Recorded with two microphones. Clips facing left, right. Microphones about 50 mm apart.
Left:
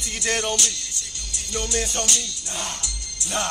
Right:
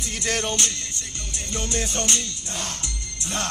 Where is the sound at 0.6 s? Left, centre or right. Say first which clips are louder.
Even; right.